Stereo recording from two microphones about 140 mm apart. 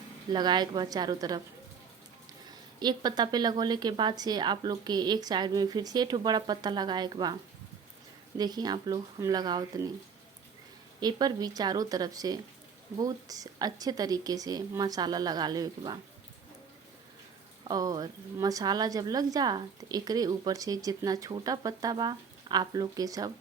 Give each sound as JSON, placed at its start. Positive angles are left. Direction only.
{"t": 0.3, "sound": "a woman's voice", "side_deg": -30}
{"t": 2.7, "sound": "a woman's voice", "side_deg": -30}
{"t": 8.4, "sound": "a woman's voice", "side_deg": -30}
{"t": 11.0, "sound": "a woman's voice", "side_deg": -30}
{"t": 17.7, "sound": "a woman's voice", "side_deg": -25}